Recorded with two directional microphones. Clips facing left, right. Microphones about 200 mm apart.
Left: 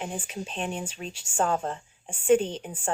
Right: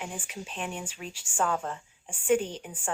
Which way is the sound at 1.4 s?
35° left (ahead or behind).